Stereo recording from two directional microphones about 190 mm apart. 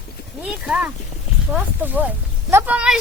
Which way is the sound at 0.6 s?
5° right (ahead or behind).